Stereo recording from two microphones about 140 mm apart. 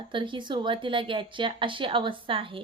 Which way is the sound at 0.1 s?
35° right (ahead or behind).